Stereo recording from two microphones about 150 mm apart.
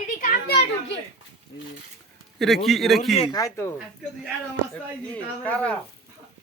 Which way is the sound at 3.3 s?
25° left (ahead or behind).